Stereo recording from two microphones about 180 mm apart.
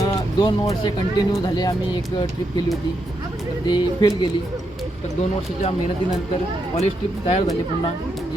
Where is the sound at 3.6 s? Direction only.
25° left (ahead or behind).